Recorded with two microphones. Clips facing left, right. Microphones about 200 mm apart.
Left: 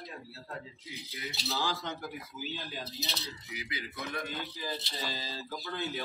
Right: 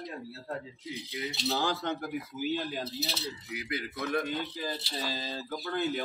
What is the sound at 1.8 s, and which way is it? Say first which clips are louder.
Speech: right 6 dB; 50° right (ahead or behind).